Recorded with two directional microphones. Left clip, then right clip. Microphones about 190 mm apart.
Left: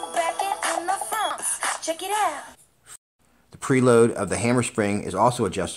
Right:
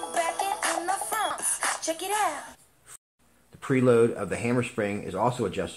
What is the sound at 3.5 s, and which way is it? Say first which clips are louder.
Speech: left 3 dB; 45° left (ahead or behind).